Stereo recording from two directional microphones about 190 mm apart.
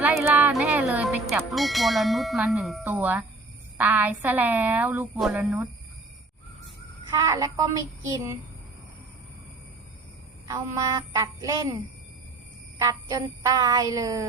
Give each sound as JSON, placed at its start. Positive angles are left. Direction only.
{"t": 0.0, "sound": "a woman's voice", "side_deg": -10}
{"t": 7.2, "sound": "a woman's voice", "side_deg": -15}
{"t": 10.4, "sound": "a woman's voice", "side_deg": -20}
{"t": 12.8, "sound": "a woman's voice", "side_deg": -20}